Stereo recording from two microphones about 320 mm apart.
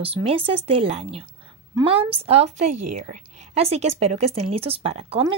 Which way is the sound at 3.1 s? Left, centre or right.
Centre.